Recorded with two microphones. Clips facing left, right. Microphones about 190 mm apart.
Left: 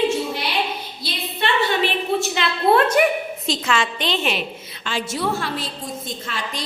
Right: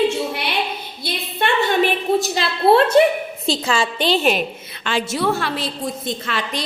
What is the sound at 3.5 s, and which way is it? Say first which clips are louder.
Speech: right 3 dB; 30° right (ahead or behind).